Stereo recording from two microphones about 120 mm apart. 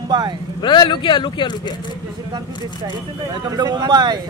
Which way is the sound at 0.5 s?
40° left (ahead or behind).